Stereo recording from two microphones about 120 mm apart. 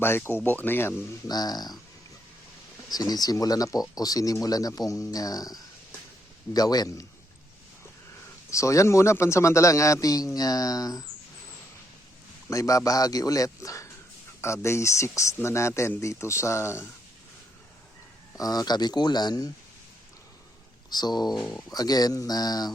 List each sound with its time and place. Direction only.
0.0 s speech: 20° left (ahead or behind)
1.3 s speech: 35° left (ahead or behind)
2.9 s speech: 30° left (ahead or behind)
8.4 s a man's voice: 25° left (ahead or behind)
12.5 s a man's voice: 25° left (ahead or behind)
18.3 s speech: 30° left (ahead or behind)
20.9 s speech: 35° left (ahead or behind)
21.2 s speech: centre (ahead or behind)
21.7 s speech: 35° left (ahead or behind)